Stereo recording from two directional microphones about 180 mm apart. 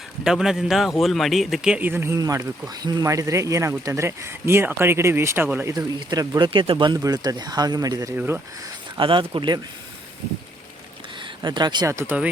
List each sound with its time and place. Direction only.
0.3 s a man's voice: centre (ahead or behind)
5.7 s speech: 20° right (ahead or behind)
8.1 s a man's voice: 10° right (ahead or behind)
9.0 s speech: 30° right (ahead or behind)
11.2 s speech: 25° right (ahead or behind); by 12.3 s 10° right (ahead or behind)